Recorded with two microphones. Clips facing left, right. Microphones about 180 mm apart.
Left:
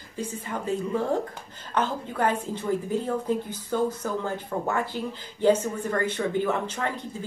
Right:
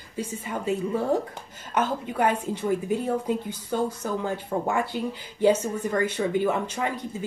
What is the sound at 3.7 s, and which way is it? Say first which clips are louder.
Speech: left 1 dB; 15° right (ahead or behind).